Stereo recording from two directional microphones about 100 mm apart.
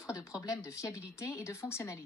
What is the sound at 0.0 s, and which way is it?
A woman's voice, 30° left (ahead or behind).